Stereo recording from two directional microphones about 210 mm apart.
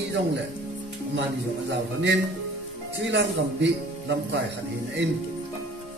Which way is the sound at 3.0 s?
55° right (ahead or behind).